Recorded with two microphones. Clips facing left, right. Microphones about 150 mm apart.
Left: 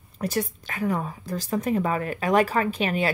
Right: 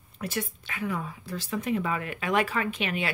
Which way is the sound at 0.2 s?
40° left (ahead or behind).